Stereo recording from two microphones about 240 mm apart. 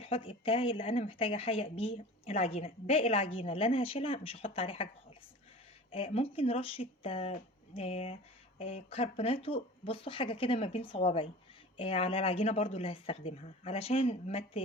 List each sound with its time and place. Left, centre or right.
0.0 s speech: left
5.9 s speech: left